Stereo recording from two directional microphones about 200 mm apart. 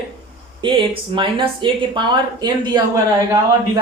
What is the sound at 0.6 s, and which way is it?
Speech, 25° right (ahead or behind).